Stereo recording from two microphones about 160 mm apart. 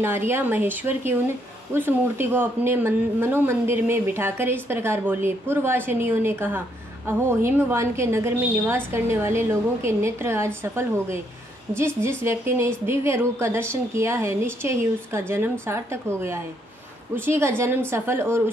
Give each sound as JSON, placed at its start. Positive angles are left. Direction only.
{"t": 0.0, "sound": "speech", "side_deg": -15}